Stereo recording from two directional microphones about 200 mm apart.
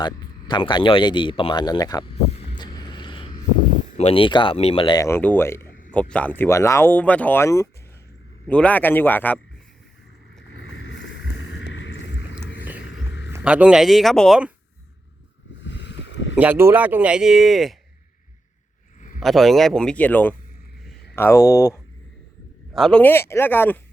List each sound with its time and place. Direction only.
0.0 s speech: 20° left (ahead or behind)
2.5 s vehicle: 20° left (ahead or behind)
3.9 s speech: 30° left (ahead or behind); by 9.4 s 10° left (ahead or behind)
10.6 s vehicle: 70° left (ahead or behind)
12.9 s a sound: 65° left (ahead or behind)
13.3 s speech: 5° right (ahead or behind)
15.6 s boat: 60° left (ahead or behind)
16.3 s speech: 5° right (ahead or behind)
18.9 s a sound: 40° left (ahead or behind)
19.2 s speech: centre (ahead or behind); by 21.8 s 15° left (ahead or behind)
22.7 s speech: centre (ahead or behind)